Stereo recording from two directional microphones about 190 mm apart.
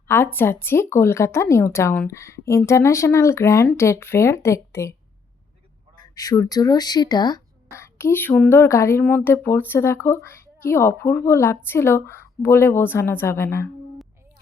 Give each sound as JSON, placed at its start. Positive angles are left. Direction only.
{"t": 0.1, "sound": "speech", "side_deg": 10}
{"t": 6.0, "sound": "speech", "side_deg": 20}